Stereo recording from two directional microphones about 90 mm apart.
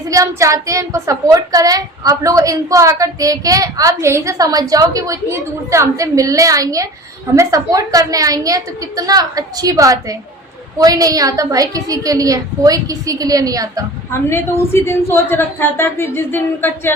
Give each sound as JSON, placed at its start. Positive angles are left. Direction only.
{"t": 0.1, "sound": "a woman's voice", "side_deg": -35}
{"t": 14.1, "sound": "a woman's voice", "side_deg": 30}